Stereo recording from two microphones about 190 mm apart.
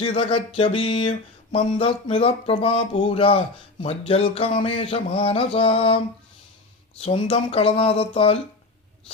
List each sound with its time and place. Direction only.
0.0 s speech: 30° left (ahead or behind)
7.0 s speech: 30° left (ahead or behind)